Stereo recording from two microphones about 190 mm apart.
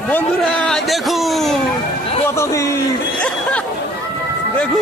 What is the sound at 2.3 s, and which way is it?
Speech, 15° left (ahead or behind).